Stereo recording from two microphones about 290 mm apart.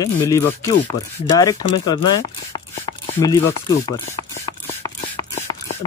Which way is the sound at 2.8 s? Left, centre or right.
Centre.